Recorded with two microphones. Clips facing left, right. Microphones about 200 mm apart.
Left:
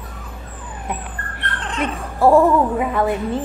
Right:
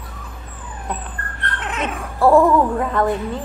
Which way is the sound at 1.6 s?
5° right (ahead or behind).